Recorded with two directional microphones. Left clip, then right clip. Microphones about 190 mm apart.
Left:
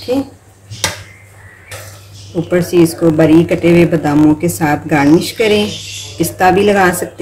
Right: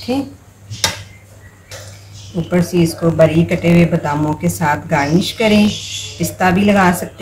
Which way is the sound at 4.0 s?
45° left (ahead or behind).